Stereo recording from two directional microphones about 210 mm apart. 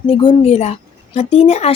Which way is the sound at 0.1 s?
25° left (ahead or behind).